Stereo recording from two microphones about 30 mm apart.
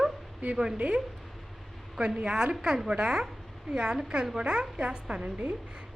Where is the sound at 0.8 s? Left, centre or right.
Right.